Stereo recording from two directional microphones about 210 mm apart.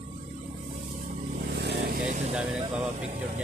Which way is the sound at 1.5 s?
55° right (ahead or behind).